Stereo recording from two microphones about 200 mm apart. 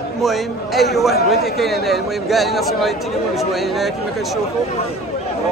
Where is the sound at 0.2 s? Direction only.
Centre (ahead or behind).